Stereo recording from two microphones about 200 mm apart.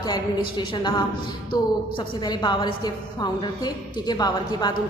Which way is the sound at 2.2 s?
20° left (ahead or behind).